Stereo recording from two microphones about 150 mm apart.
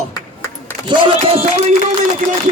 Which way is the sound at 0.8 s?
35° right (ahead or behind).